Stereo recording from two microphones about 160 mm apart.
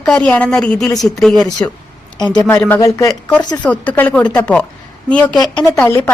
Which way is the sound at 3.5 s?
5° left (ahead or behind).